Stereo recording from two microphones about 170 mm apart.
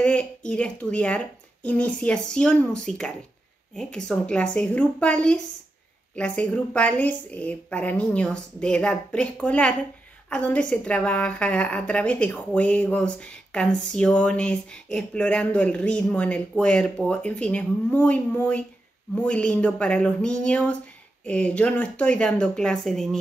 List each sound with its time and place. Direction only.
0.0 s a woman's voice: 5° left (ahead or behind)